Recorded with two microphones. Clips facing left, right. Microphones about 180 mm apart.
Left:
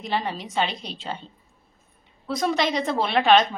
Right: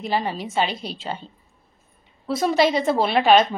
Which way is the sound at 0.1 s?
Centre (ahead or behind).